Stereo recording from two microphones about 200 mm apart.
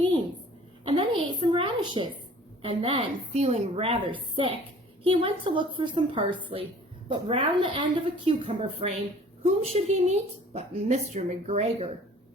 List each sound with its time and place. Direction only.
0.9 s a woman's voice: 25° right (ahead or behind)